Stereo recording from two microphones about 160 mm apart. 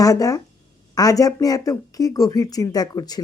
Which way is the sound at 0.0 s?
20° left (ahead or behind).